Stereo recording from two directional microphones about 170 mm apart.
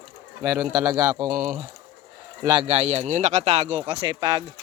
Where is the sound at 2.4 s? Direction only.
30° right (ahead or behind).